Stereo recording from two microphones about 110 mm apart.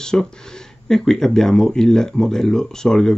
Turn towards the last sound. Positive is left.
turn(degrees=5)  # may be behind; listen again after turning